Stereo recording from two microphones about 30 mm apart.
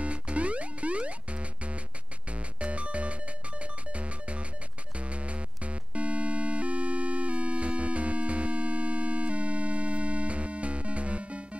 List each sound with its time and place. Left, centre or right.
0.0 s music: right